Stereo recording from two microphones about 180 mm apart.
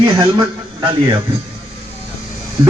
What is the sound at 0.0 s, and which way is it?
Speech, 20° right (ahead or behind).